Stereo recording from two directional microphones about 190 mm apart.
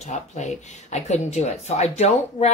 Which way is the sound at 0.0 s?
40° left (ahead or behind).